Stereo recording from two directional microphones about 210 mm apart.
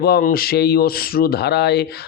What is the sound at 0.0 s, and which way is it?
Speech, 45° left (ahead or behind).